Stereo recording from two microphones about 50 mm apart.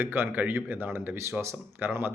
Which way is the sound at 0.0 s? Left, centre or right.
Right.